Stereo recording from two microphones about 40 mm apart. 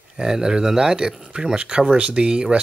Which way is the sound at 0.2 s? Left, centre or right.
Centre.